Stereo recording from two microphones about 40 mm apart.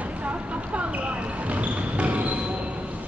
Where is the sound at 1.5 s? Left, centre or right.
Right.